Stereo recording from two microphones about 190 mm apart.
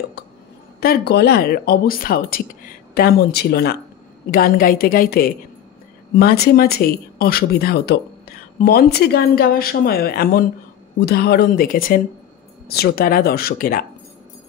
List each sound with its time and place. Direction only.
0.7 s speech: 55° left (ahead or behind)